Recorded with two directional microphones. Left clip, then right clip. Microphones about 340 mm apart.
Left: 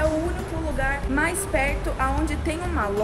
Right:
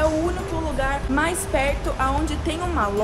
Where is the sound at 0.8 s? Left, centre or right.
Centre.